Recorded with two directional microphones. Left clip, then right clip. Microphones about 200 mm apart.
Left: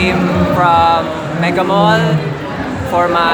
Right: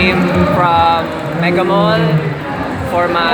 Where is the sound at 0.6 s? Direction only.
5° left (ahead or behind).